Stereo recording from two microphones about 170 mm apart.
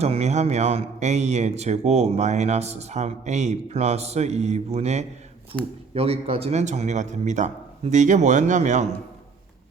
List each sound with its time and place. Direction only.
0.0 s a man's voice: 40° right (ahead or behind)